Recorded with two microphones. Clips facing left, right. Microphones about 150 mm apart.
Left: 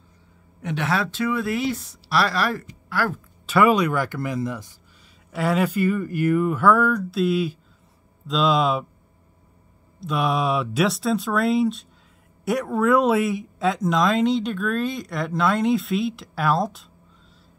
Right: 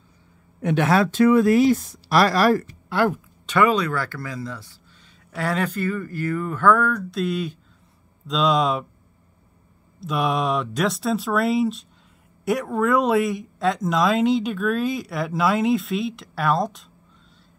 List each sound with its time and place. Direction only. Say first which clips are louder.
0.6 s speech: right 6 dB; 55° right (ahead or behind)
2.9 s speech: right 4 dB; 25° right (ahead or behind)
3.4 s speech: left 2 dB; 5° left (ahead or behind)
5.3 s speech: left 3 dB; 5° left (ahead or behind)
9.9 s speech: even; centre (ahead or behind)